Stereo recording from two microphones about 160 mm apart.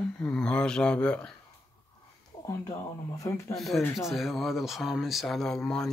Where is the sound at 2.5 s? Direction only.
20° left (ahead or behind).